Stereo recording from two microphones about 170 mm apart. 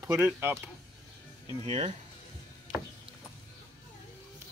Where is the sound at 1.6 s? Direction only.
40° right (ahead or behind).